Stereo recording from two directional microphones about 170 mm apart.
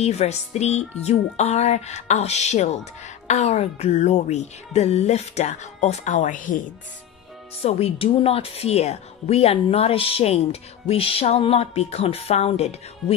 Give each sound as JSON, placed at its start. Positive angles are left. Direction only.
{"t": 0.0, "sound": "music", "side_deg": 40}
{"t": 7.6, "sound": "music", "side_deg": 35}